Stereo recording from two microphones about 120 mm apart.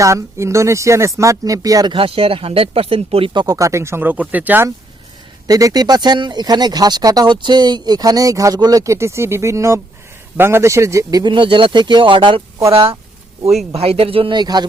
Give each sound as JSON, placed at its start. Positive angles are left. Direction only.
{"t": 0.0, "sound": "speech", "side_deg": -25}
{"t": 2.0, "sound": "speech", "side_deg": -50}
{"t": 3.4, "sound": "speech", "side_deg": -30}
{"t": 5.5, "sound": "speech", "side_deg": -30}
{"t": 11.2, "sound": "speech", "side_deg": -45}